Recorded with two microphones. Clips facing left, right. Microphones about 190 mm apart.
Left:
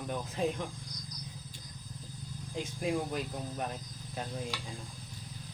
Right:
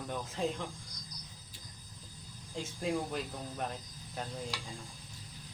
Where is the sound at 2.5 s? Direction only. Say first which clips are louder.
Left 2 dB; 15° left (ahead or behind).